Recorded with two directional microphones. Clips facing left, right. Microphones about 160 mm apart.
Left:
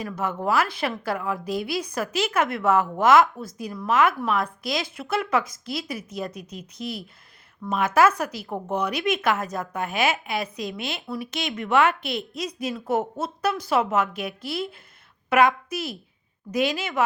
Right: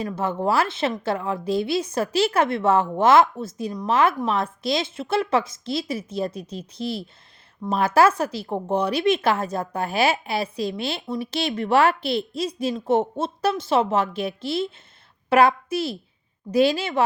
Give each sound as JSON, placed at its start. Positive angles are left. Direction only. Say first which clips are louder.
{"t": 0.0, "sound": "a woman's voice", "louder": "right 3 dB", "side_deg": -30}